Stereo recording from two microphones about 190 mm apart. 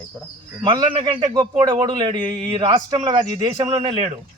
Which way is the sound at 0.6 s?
20° right (ahead or behind).